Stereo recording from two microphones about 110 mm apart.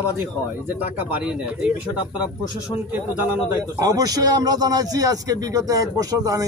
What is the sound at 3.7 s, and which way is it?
A man's voice, 35° right (ahead or behind).